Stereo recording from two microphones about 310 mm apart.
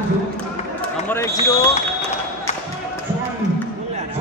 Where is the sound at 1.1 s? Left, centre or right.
Centre.